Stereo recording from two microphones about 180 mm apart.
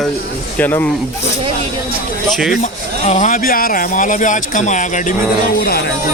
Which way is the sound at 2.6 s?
40° left (ahead or behind).